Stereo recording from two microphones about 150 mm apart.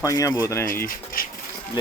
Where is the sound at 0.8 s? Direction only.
70° left (ahead or behind).